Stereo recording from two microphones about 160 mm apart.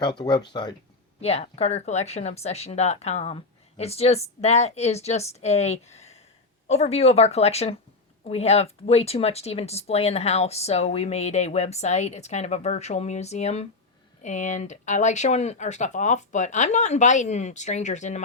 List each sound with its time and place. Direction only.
0.0 s speech: 30° left (ahead or behind)
1.2 s speech: 40° left (ahead or behind)